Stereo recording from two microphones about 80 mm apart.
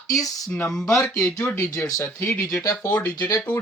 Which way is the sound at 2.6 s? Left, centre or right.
Left.